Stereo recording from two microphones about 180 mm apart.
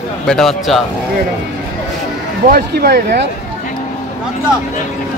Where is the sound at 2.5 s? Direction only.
60° right (ahead or behind).